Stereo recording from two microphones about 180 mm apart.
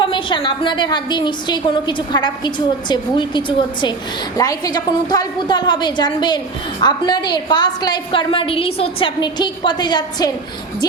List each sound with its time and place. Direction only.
0.0 s a woman's voice: 25° left (ahead or behind)